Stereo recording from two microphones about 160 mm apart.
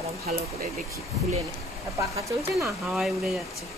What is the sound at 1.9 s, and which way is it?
Speech, 20° right (ahead or behind).